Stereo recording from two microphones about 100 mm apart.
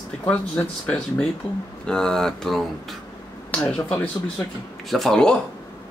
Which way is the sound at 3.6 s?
15° left (ahead or behind).